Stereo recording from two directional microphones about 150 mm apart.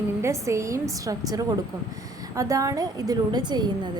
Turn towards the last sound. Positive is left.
turn(degrees=-30)  # may be behind; listen again after turning